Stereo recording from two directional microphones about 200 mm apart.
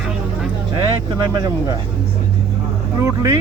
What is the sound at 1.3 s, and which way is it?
Speech, 20° right (ahead or behind).